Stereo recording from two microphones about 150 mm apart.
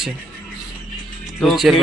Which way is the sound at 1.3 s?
Centre (ahead or behind).